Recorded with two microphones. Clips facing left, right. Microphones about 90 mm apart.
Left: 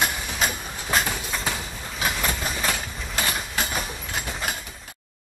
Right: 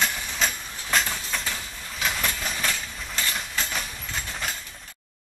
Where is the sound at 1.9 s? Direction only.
5° left (ahead or behind).